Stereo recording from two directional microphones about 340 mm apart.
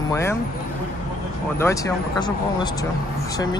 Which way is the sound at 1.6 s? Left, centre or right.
Centre.